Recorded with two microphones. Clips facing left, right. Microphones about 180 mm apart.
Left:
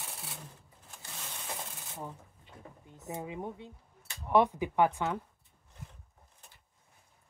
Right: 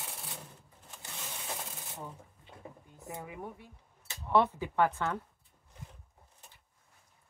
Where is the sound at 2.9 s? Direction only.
20° left (ahead or behind).